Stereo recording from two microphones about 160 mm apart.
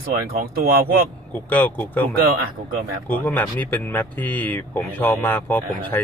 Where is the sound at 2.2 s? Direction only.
70° right (ahead or behind).